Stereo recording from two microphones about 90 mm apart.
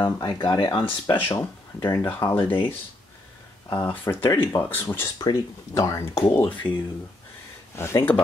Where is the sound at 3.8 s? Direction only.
25° left (ahead or behind).